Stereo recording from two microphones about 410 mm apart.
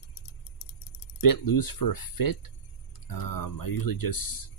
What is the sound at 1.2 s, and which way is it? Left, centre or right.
Speech, left.